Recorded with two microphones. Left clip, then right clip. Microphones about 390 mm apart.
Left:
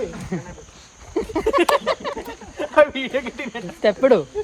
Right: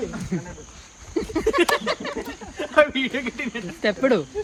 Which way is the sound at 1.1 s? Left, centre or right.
Centre.